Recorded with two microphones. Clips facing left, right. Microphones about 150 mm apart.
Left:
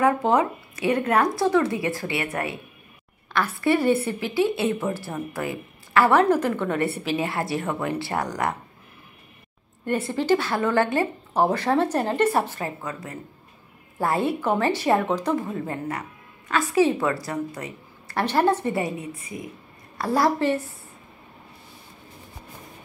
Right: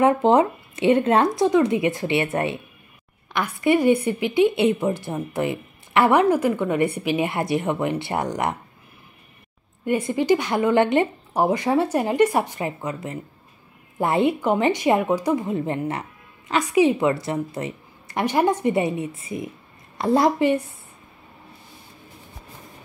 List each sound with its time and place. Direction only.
0.0 s a woman's voice: 25° right (ahead or behind)
9.8 s a woman's voice: 15° right (ahead or behind)